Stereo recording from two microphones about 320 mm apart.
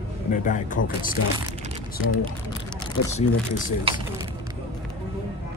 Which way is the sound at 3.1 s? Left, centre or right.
Left.